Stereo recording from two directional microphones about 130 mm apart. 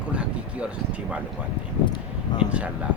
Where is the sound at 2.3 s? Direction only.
35° left (ahead or behind).